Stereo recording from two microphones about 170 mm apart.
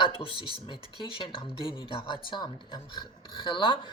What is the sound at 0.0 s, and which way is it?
Speech, 30° left (ahead or behind).